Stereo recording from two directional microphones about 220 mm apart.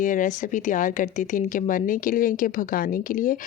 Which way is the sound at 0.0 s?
35° left (ahead or behind).